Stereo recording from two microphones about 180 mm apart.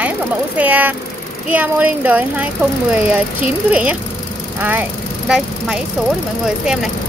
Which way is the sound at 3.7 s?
5° right (ahead or behind).